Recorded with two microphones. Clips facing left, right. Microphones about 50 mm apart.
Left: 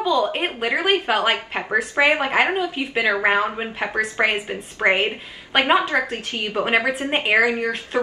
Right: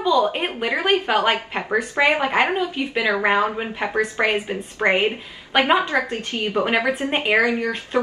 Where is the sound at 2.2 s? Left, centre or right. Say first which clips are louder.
Even; centre.